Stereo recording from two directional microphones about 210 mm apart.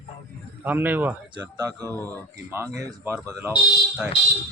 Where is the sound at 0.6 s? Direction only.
10° right (ahead or behind).